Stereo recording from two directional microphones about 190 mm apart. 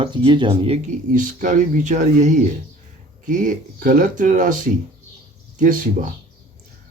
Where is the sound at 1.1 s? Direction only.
45° right (ahead or behind).